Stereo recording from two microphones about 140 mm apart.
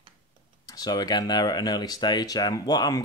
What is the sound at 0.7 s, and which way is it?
Speech, 30° left (ahead or behind).